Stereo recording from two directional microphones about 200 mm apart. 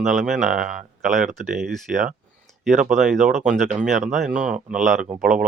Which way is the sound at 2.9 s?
Centre (ahead or behind).